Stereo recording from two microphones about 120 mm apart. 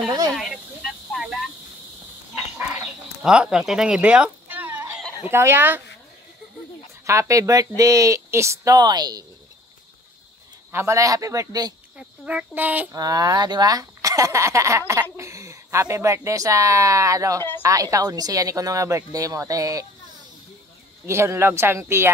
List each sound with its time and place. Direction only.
0.3 s a sound: centre (ahead or behind)
2.5 s a sound: 15° right (ahead or behind)
3.2 s speech: 5° right (ahead or behind)
7.1 s speech: 25° right (ahead or behind)
10.7 s speech: 20° right (ahead or behind)
12.0 s speech: 10° right (ahead or behind)
12.9 s speech: 30° right (ahead or behind)
21.0 s speech: 20° right (ahead or behind)